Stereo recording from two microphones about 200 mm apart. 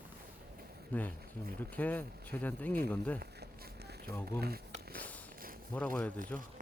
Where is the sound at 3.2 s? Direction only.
50° right (ahead or behind).